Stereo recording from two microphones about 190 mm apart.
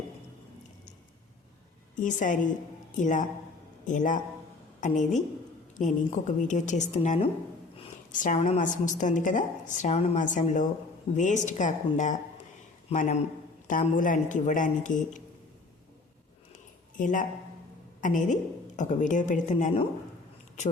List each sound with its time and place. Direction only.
2.0 s a woman's voice: 40° left (ahead or behind)
17.0 s a woman's voice: 45° left (ahead or behind)